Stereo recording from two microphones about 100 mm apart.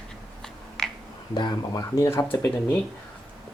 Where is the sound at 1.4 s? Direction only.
45° left (ahead or behind).